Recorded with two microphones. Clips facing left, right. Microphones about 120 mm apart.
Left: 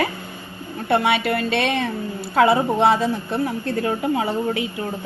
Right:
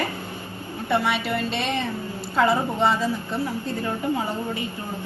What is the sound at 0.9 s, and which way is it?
A woman's voice, 60° left (ahead or behind).